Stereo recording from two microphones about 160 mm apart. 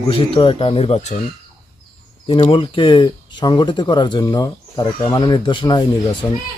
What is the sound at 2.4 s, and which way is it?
Speech, 35° left (ahead or behind).